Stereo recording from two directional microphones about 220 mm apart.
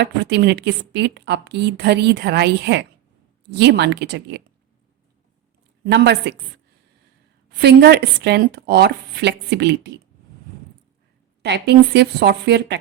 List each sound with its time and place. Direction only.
0.0 s a woman's voice: 50° right (ahead or behind)
5.8 s a woman's voice: 50° right (ahead or behind)
7.5 s a woman's voice: 50° right (ahead or behind)
11.4 s a woman's voice: 50° right (ahead or behind)